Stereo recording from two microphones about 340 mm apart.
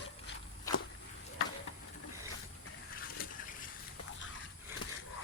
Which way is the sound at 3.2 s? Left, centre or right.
Left.